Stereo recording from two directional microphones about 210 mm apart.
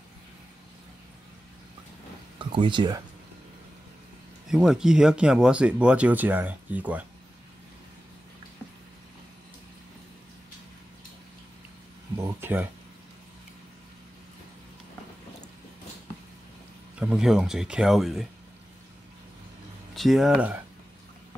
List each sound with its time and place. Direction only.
2.3 s speech: 25° right (ahead or behind)
4.5 s speech: 5° right (ahead or behind)
12.2 s a sound: 10° right (ahead or behind)
17.0 s speech: 5° right (ahead or behind)
20.0 s speech: centre (ahead or behind)